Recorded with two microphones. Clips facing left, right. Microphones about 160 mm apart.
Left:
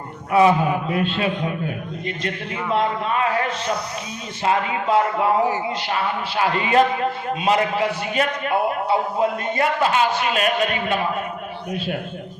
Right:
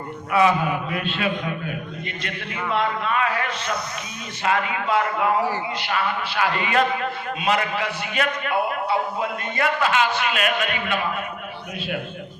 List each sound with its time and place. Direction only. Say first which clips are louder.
0.3 s a man's voice: left 3 dB; 35° left (ahead or behind)